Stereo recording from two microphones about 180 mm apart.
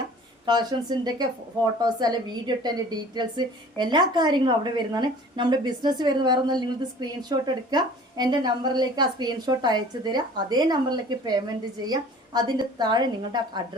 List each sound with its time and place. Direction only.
0.4 s a woman's voice: 25° right (ahead or behind)